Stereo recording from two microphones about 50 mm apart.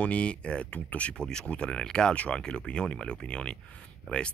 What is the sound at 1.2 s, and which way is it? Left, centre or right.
Speech, centre.